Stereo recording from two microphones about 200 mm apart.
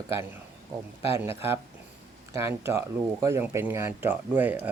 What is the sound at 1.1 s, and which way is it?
Speech, 10° right (ahead or behind).